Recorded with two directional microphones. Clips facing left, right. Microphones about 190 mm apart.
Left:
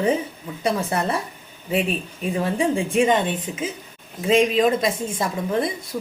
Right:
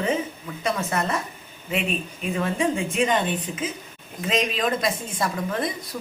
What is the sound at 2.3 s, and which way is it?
Speech, 30° left (ahead or behind).